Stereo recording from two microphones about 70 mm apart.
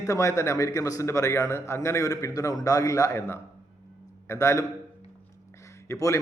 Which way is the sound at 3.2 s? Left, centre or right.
Left.